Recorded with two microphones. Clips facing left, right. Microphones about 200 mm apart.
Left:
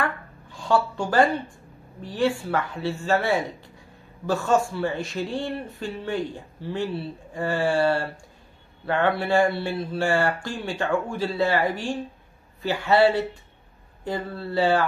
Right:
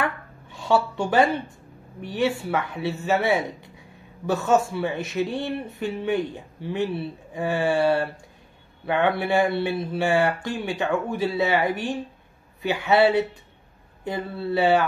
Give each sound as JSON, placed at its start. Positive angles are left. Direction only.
{"t": 0.0, "sound": "chopping", "side_deg": -20}
{"t": 2.0, "sound": "a man's voice", "side_deg": -20}